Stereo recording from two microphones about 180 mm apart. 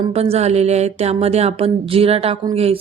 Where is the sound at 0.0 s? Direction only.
35° right (ahead or behind).